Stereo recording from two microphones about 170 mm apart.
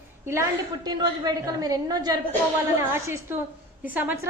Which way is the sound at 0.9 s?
25° right (ahead or behind).